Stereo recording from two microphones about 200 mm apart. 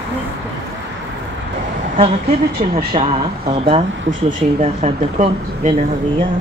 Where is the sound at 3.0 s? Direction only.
30° right (ahead or behind).